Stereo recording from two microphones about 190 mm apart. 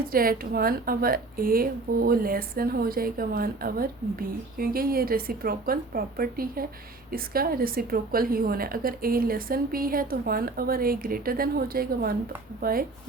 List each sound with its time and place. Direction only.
0.1 s a woman's voice: 50° right (ahead or behind)